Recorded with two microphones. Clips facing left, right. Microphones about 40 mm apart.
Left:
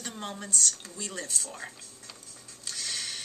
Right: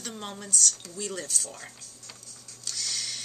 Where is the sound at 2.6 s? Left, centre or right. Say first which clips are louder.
Right 1 dB; left.